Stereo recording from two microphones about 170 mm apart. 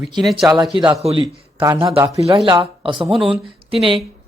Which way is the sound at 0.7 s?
30° right (ahead or behind).